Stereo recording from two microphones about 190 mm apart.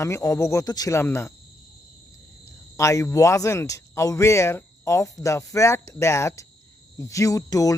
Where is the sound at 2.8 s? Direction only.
15° left (ahead or behind).